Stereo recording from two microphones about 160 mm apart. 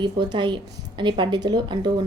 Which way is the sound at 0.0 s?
30° right (ahead or behind).